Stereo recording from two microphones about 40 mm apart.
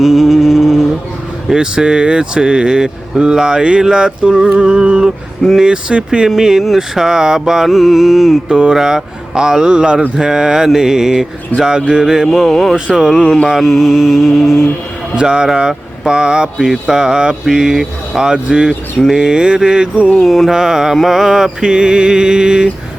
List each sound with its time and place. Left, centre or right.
0.0 s music: centre
1.5 s speech: centre
4.5 s mantra: centre
8.4 s speech: centre
10.2 s mantra: centre
12.3 s speech: centre
13.4 s mantra: centre
15.1 s speech: right
17.4 s mantra: centre
18.3 s speech: right
19.0 s mantra: centre
20.1 s speech: centre
20.5 s mantra: centre
20.9 s speech: centre; by 22.7 s right